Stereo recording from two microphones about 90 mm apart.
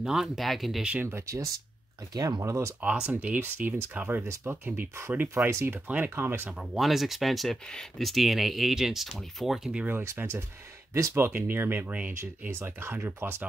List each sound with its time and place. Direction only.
0.0 s speech: 5° right (ahead or behind)
1.0 s speech: 35° right (ahead or behind)
2.8 s speech: 15° right (ahead or behind)
6.6 s speech: centre (ahead or behind)
9.8 s speech: 25° right (ahead or behind)
12.2 s speech: 30° right (ahead or behind)